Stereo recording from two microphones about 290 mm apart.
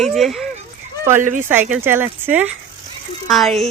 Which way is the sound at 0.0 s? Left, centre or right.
Centre.